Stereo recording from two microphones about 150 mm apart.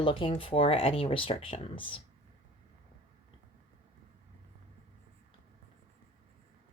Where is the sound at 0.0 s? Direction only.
35° left (ahead or behind).